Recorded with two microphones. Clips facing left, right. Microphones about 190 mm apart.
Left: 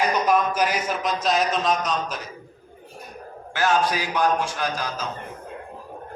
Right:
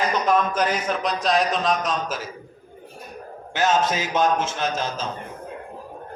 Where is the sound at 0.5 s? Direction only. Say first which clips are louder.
Right 1 dB; 10° left (ahead or behind).